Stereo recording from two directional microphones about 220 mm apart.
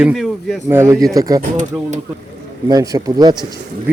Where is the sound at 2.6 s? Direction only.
15° right (ahead or behind).